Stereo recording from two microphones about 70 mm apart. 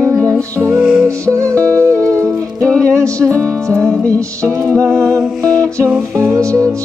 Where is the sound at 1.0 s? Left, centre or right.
Right.